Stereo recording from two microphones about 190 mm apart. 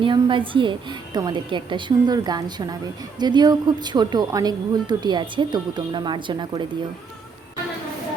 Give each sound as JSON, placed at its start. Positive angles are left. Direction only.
{"t": 0.0, "sound": "a woman's voice", "side_deg": -25}